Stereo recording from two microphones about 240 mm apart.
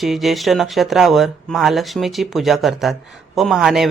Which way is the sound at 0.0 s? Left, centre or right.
Centre.